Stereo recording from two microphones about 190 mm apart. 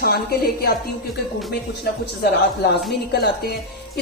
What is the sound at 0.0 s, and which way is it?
Speech, 55° left (ahead or behind).